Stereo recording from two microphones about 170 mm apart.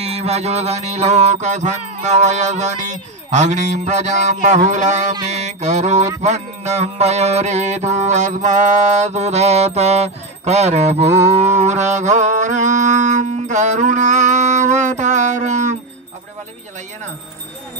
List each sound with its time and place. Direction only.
0.0 s music: 35° right (ahead or behind)
6.2 s mantra: 45° right (ahead or behind)
11.6 s music: 45° right (ahead or behind)